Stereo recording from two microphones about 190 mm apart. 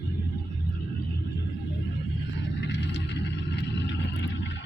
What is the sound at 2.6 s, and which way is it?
Vehicle, 70° left (ahead or behind).